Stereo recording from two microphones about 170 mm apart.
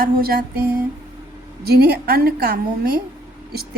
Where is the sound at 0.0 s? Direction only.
60° right (ahead or behind).